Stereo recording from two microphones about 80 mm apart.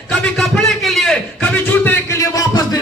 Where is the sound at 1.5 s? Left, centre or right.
Left.